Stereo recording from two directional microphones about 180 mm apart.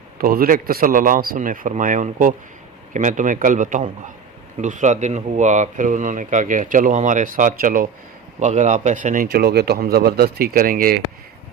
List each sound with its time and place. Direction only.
0.2 s a man's voice: 55° right (ahead or behind)